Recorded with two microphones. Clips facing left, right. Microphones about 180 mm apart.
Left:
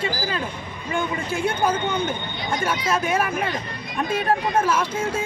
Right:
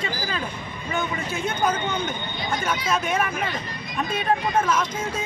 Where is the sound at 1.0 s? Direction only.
10° left (ahead or behind).